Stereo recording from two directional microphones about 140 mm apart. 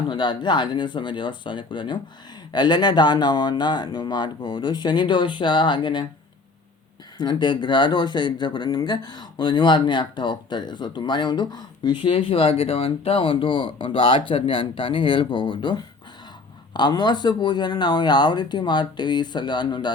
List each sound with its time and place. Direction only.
0.1 s speech: 35° left (ahead or behind)
7.2 s speech: 30° left (ahead or behind)